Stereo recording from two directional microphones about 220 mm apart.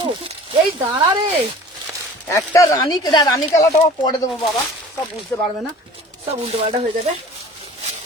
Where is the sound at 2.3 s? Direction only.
15° left (ahead or behind).